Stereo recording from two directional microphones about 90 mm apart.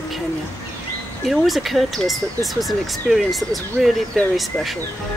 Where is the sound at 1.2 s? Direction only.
Centre (ahead or behind).